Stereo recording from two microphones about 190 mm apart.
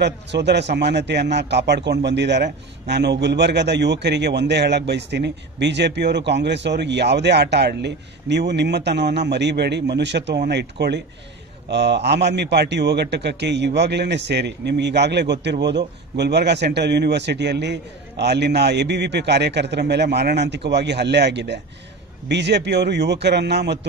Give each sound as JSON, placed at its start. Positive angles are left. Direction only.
{"t": 0.0, "sound": "a man's voice", "side_deg": -65}